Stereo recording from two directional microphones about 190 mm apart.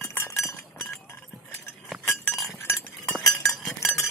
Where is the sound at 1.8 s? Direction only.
Centre (ahead or behind).